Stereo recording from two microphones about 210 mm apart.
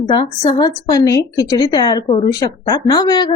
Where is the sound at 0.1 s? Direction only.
20° left (ahead or behind).